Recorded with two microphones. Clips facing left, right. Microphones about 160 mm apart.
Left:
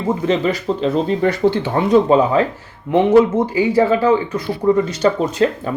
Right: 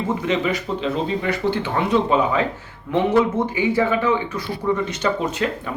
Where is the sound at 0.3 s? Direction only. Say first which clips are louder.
Left 5 dB; 35° left (ahead or behind).